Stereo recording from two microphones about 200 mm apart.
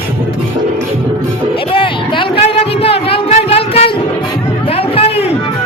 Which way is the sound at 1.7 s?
25° left (ahead or behind).